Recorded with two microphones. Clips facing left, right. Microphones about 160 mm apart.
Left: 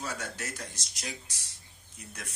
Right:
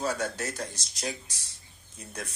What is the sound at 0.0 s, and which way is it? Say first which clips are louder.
Speech: right 7 dB; 35° right (ahead or behind).